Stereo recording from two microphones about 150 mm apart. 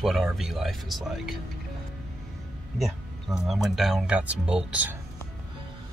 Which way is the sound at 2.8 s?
Centre (ahead or behind).